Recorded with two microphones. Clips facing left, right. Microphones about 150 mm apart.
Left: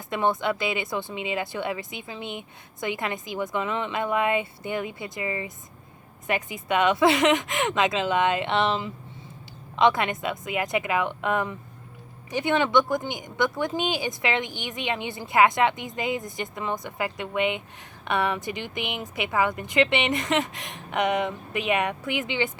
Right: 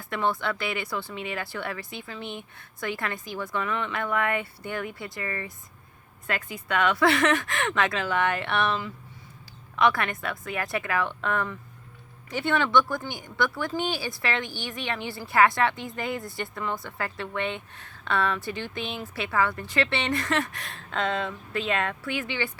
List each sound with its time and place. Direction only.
0.0 s speech: 20° left (ahead or behind)